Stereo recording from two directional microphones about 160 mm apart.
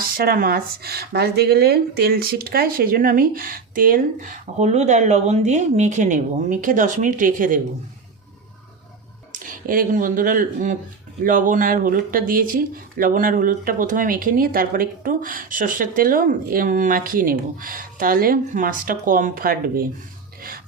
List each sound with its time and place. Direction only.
0.0 s speech: 65° right (ahead or behind)
9.4 s speech: 60° right (ahead or behind)